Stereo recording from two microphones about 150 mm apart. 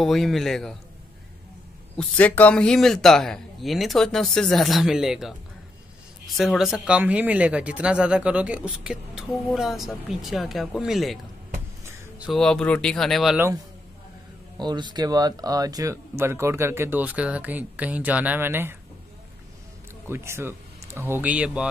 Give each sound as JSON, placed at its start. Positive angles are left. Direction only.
{"t": 0.0, "sound": "speech", "side_deg": 0}
{"t": 2.0, "sound": "speech", "side_deg": 10}
{"t": 12.3, "sound": "speech", "side_deg": 5}
{"t": 14.6, "sound": "speech", "side_deg": -30}
{"t": 20.1, "sound": "speech", "side_deg": -15}